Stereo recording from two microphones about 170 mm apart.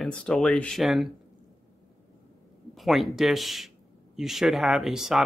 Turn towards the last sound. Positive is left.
turn(degrees=0)  # may be behind; listen again after turning